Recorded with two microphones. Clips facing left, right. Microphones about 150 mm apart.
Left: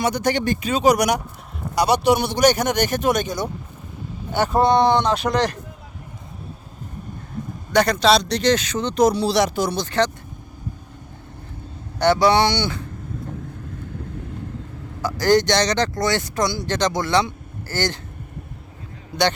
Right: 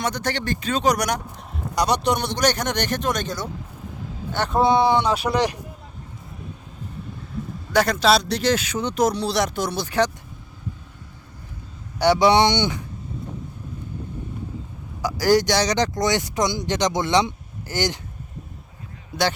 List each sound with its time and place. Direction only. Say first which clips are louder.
0.0 s speech: left 5 dB; 10° left (ahead or behind); by 5.5 s 10° right (ahead or behind)
7.7 s a man's voice: left 2 dB; 5° right (ahead or behind)
9.0 s a man's voice: left 4 dB; centre (ahead or behind)
9.8 s speech: right 1 dB; 10° right (ahead or behind)
11.9 s speech: even; 10° right (ahead or behind)
15.0 s speech: left 1 dB; 10° right (ahead or behind)